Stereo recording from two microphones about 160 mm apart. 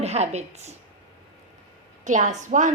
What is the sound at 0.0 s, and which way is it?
Speech, 45° right (ahead or behind).